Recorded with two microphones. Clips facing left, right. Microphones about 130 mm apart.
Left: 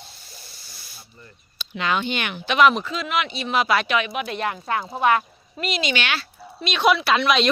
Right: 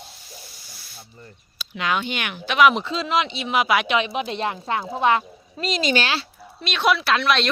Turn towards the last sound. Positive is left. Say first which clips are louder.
# left 1 dB
turn(degrees=0)  # may be behind; listen again after turning